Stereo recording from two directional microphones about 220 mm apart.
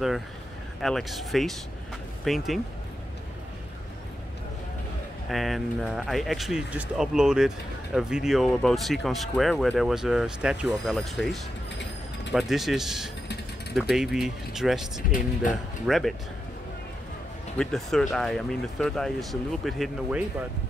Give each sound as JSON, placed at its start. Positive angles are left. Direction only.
{"t": 0.7, "sound": "speech", "side_deg": 0}
{"t": 5.3, "sound": "speech", "side_deg": 0}
{"t": 15.0, "sound": "speech", "side_deg": 35}
{"t": 15.9, "sound": "speech", "side_deg": 0}
{"t": 17.6, "sound": "speech", "side_deg": 0}